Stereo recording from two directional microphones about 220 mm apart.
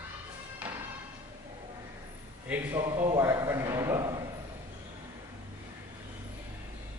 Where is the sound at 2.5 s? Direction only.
15° right (ahead or behind).